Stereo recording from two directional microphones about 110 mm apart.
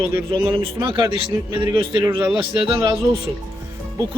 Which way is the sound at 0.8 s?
50° right (ahead or behind).